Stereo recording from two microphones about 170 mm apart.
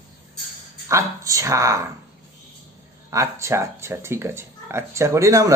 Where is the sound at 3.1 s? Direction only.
20° right (ahead or behind).